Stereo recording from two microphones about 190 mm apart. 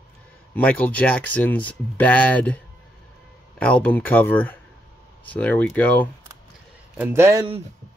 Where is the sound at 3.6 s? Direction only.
5° left (ahead or behind).